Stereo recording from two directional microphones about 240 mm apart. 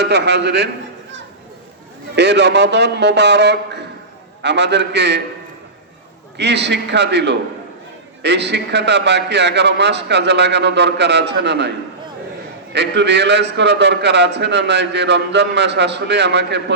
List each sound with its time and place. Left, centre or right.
0.0 s a man's voice: right
2.1 s a man's voice: right
6.3 s a man's voice: right
12.7 s a man's voice: right